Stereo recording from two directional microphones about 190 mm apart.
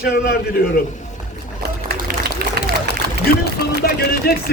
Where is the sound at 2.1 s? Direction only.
55° right (ahead or behind).